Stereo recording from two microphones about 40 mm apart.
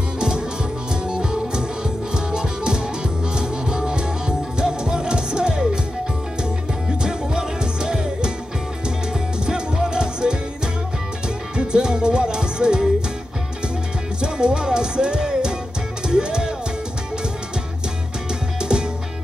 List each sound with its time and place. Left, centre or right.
1.0 s music: centre
7.0 s music: centre
9.5 s music: centre
11.5 s music: right
14.2 s music: right
18.6 s music: right